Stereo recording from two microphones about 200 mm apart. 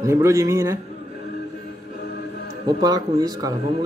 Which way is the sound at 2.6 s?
20° right (ahead or behind).